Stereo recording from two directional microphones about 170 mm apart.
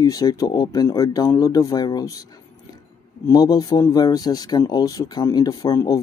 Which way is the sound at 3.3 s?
20° left (ahead or behind).